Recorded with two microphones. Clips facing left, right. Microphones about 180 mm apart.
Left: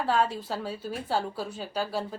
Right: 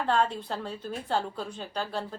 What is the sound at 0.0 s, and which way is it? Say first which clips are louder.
Speech: even; 5° left (ahead or behind).